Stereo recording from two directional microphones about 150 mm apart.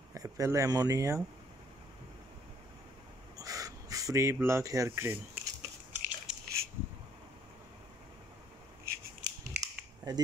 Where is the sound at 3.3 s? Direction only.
25° right (ahead or behind).